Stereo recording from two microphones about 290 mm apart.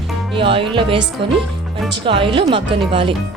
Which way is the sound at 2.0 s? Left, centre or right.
Centre.